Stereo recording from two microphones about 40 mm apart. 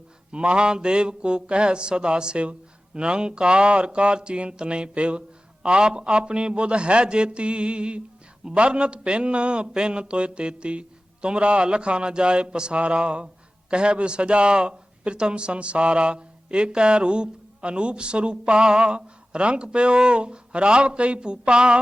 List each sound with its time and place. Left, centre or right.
0.3 s a man's voice: right